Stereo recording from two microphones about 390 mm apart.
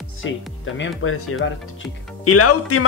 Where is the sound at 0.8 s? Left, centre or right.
Left.